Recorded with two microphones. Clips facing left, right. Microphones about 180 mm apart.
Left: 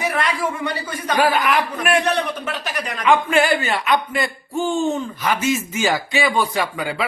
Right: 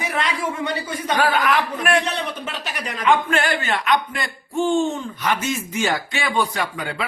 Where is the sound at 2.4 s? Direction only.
25° right (ahead or behind).